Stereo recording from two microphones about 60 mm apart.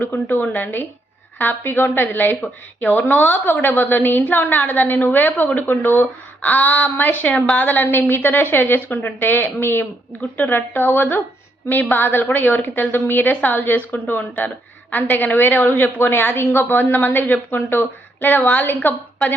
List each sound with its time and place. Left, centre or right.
0.0 s a woman's voice: left